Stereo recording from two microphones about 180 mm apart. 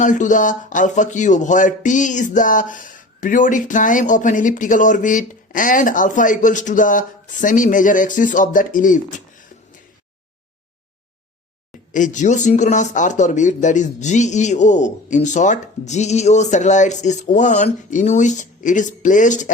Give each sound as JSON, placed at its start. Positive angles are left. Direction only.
{"t": 0.0, "sound": "speech", "side_deg": 45}
{"t": 11.9, "sound": "speech", "side_deg": 45}